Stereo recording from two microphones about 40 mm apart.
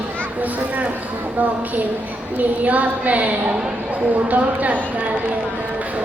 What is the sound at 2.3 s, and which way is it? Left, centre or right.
A woman's voice, right.